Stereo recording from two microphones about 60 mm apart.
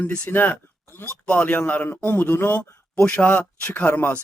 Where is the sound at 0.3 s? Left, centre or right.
Left.